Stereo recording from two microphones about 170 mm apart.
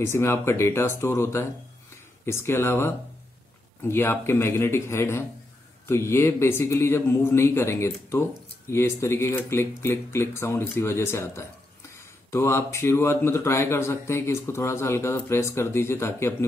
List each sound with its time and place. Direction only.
0.0 s a man's voice: 15° left (ahead or behind)
3.9 s a man's voice: 15° left (ahead or behind)